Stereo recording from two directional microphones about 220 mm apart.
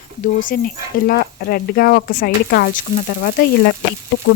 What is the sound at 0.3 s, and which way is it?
A woman's voice, 40° left (ahead or behind).